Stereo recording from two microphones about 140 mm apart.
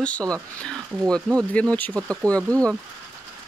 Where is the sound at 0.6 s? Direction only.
5° left (ahead or behind).